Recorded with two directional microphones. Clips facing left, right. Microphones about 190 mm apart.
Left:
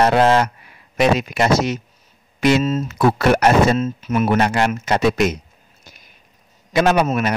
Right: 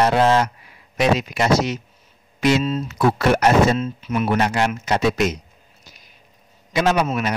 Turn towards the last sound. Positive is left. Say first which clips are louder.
# left 3 dB
turn(degrees=50)  # may be behind; listen again after turning